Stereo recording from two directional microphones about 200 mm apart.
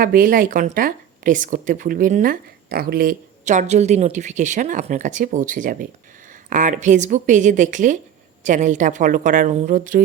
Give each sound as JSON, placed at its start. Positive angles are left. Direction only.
{"t": 0.0, "sound": "a woman's voice", "side_deg": -45}